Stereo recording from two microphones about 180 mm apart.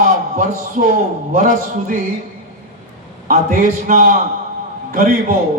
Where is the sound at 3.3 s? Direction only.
45° right (ahead or behind).